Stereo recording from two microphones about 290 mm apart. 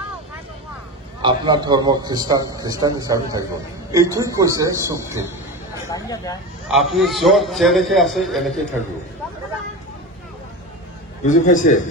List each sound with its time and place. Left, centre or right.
1.2 s a man's voice: centre
5.9 s speech: centre
6.7 s a man's voice: centre
11.2 s a man's voice: left